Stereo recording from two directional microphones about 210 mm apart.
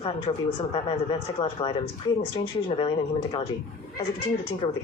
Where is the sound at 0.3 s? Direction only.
20° left (ahead or behind).